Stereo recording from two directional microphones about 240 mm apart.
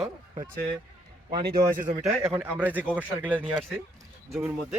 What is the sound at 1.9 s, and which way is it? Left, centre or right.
Speech, centre.